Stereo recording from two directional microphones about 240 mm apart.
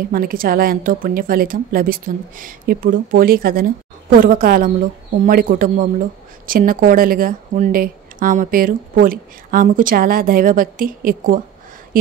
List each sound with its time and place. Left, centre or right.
0.1 s a woman's voice: right